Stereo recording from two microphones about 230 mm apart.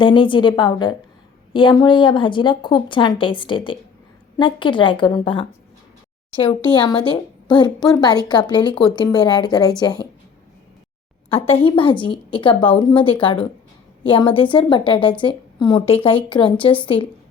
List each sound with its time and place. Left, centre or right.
0.0 s a woman's voice: left
11.3 s a woman's voice: left